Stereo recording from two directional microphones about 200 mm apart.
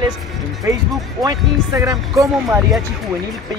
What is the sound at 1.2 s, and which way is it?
Speech, 15° right (ahead or behind).